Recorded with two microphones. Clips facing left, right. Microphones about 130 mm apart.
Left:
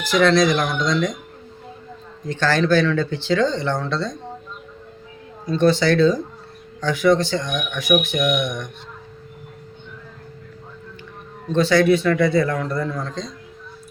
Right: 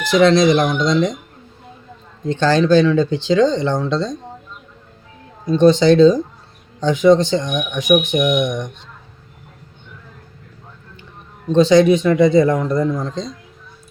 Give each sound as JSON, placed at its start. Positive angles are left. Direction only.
{"t": 0.1, "sound": "speech", "side_deg": -20}
{"t": 2.2, "sound": "speech", "side_deg": -20}
{"t": 5.5, "sound": "speech", "side_deg": -20}
{"t": 11.5, "sound": "speech", "side_deg": -20}